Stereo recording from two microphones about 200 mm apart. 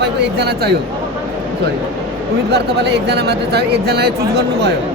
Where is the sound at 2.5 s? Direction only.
55° right (ahead or behind).